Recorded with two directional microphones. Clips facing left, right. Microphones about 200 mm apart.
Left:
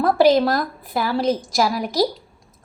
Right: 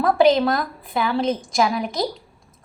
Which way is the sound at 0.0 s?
Centre (ahead or behind).